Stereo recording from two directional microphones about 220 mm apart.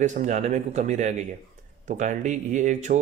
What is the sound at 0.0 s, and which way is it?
Speech, 35° right (ahead or behind).